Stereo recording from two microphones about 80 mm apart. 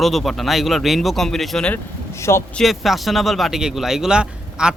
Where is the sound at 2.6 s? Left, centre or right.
Centre.